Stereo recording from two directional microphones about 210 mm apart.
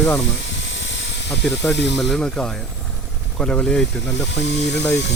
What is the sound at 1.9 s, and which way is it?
Speech, centre (ahead or behind).